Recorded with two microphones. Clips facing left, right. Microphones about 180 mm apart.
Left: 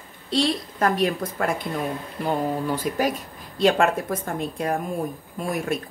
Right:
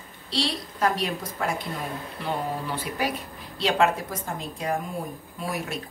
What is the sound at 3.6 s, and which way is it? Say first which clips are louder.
A woman's voice: left 4 dB; 50° left (ahead or behind).